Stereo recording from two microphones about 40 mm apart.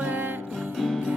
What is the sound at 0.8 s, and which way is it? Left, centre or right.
Music, centre.